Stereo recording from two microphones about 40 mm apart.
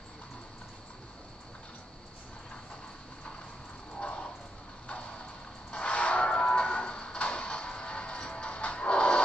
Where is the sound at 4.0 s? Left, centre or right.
Left.